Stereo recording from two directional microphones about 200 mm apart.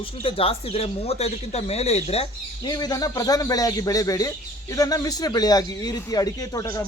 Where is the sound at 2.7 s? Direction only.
20° left (ahead or behind).